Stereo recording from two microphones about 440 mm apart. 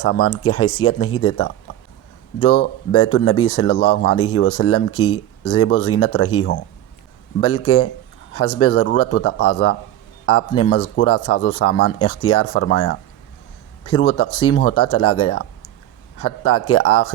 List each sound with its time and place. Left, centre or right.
0.0 s speech: left